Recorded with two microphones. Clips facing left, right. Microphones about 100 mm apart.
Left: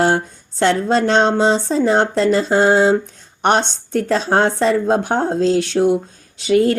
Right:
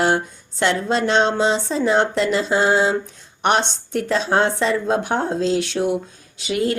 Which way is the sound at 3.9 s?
40° left (ahead or behind).